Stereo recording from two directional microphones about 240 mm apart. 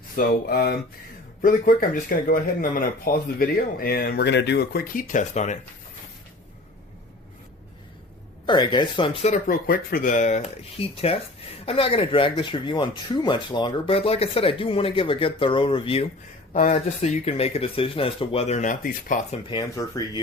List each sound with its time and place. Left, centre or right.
0.2 s speech: left
8.4 s speech: centre; by 19.4 s left
19.5 s speech: centre